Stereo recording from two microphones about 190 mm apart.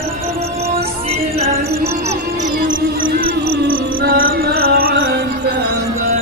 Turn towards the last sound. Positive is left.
turn(degrees=-70)  # may be behind; listen again after turning